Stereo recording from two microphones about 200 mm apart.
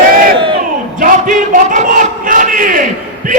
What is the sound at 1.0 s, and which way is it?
Speech, 40° right (ahead or behind).